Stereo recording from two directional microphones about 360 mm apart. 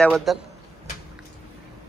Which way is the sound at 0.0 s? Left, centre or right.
Centre.